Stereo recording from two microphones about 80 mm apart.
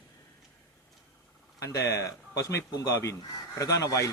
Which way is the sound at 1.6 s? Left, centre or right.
Left.